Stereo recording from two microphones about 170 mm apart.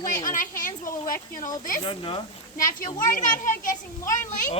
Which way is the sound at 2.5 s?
55° left (ahead or behind).